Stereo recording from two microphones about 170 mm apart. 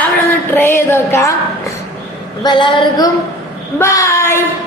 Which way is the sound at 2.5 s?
30° left (ahead or behind).